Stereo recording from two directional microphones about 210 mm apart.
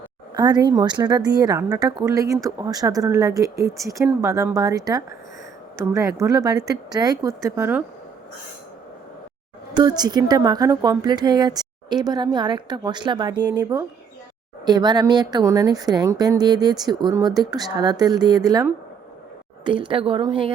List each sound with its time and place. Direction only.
0.3 s speech: 20° right (ahead or behind)
9.7 s a woman's voice: 20° right (ahead or behind)